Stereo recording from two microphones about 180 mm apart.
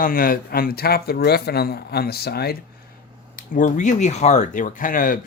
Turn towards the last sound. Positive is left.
turn(degrees=50)  # may be behind; listen again after turning